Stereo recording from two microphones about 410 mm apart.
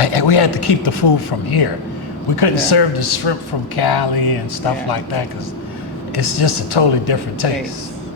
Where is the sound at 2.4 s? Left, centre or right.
Left.